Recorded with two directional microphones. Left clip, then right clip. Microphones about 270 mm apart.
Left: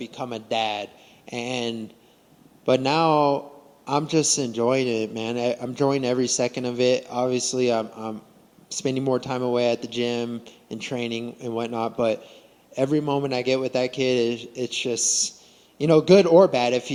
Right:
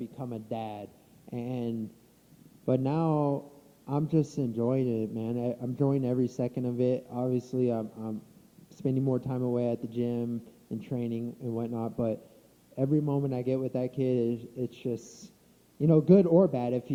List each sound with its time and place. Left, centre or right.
0.0 s speech: centre
7.9 s speech: centre
8.7 s speech: centre